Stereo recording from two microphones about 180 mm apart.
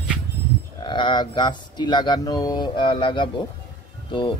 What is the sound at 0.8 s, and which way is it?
Speech, 25° left (ahead or behind).